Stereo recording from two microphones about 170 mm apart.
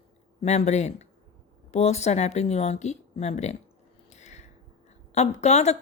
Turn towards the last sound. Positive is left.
turn(degrees=40)  # may be behind; listen again after turning